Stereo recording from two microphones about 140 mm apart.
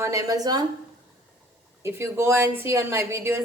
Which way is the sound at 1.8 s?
20° right (ahead or behind).